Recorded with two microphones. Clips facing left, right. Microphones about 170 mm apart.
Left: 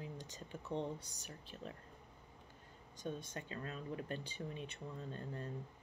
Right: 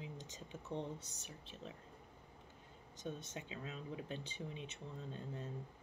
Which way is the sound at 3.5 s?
50° left (ahead or behind).